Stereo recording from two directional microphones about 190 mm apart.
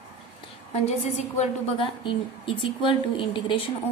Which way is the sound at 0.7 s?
35° left (ahead or behind).